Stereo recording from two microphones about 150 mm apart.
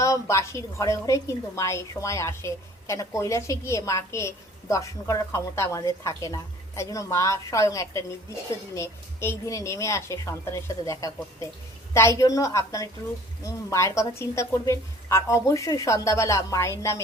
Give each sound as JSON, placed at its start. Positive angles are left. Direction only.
{"t": 0.0, "sound": "a woman's voice", "side_deg": 20}